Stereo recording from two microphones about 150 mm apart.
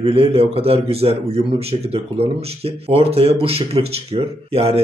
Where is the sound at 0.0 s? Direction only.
40° right (ahead or behind).